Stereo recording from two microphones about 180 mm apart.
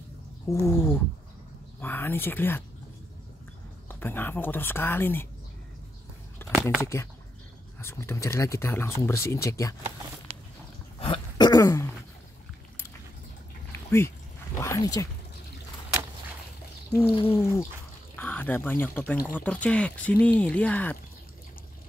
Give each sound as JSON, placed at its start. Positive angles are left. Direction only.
{"t": 0.5, "sound": "speech", "side_deg": 15}
{"t": 3.9, "sound": "speech", "side_deg": 10}
{"t": 6.5, "sound": "a sound", "side_deg": -5}
{"t": 6.8, "sound": "speech", "side_deg": 15}
{"t": 11.0, "sound": "throat clearing", "side_deg": 30}
{"t": 13.7, "sound": "a sound", "side_deg": 15}
{"t": 17.3, "sound": "speech", "side_deg": 15}